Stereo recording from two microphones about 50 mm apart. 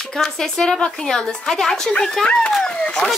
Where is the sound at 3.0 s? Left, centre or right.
Centre.